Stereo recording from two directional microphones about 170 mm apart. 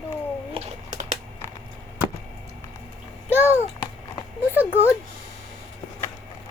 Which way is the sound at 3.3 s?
10° right (ahead or behind).